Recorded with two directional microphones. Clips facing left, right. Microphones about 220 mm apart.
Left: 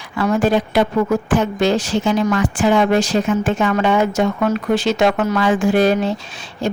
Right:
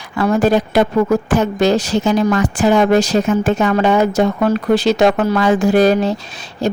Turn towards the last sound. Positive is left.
turn(degrees=-40)  # may be behind; listen again after turning